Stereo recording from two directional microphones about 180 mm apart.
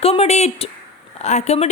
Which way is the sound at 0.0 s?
35° left (ahead or behind).